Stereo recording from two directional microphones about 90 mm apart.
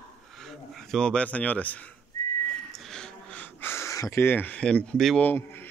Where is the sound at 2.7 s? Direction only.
5° left (ahead or behind).